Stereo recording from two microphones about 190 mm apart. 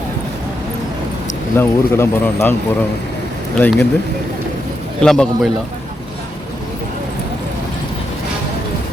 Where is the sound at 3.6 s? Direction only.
5° left (ahead or behind).